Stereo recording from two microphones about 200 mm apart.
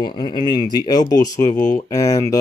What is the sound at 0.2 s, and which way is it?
Speech, 20° left (ahead or behind).